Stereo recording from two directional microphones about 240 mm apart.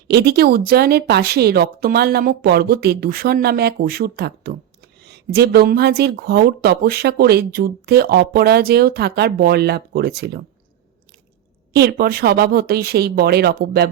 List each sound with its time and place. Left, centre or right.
0.1 s speech: right
11.7 s speech: right